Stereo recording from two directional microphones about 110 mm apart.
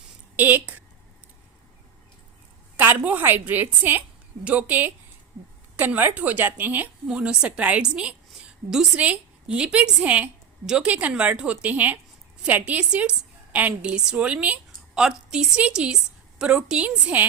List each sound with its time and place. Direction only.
0.3 s a woman's voice: 15° right (ahead or behind)
2.7 s a woman's voice: 20° right (ahead or behind)